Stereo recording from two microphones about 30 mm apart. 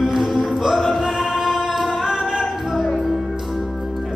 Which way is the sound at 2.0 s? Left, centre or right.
Centre.